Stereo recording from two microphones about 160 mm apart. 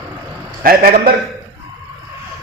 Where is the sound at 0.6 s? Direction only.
65° right (ahead or behind).